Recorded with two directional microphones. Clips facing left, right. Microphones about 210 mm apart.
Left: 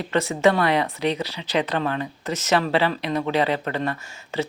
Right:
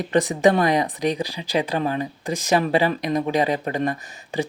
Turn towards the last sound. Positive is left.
turn(degrees=-15)  # may be behind; listen again after turning